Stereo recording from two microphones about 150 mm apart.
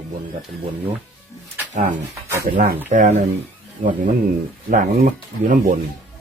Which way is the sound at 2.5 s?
60° right (ahead or behind).